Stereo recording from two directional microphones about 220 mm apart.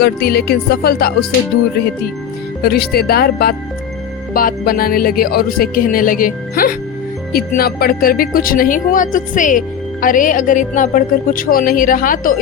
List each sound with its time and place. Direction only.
0.0 s speech: 45° left (ahead or behind)
2.6 s speech: 45° left (ahead or behind)